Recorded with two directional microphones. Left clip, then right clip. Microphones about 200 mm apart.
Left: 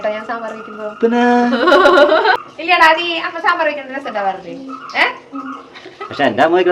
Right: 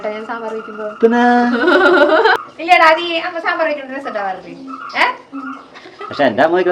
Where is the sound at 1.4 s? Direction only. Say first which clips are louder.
Left 1 dB; 15° left (ahead or behind).